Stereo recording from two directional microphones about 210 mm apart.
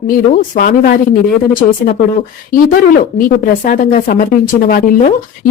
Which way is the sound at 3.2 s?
40° left (ahead or behind).